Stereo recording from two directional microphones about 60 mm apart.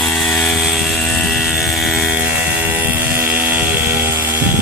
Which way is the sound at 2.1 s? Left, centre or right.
Right.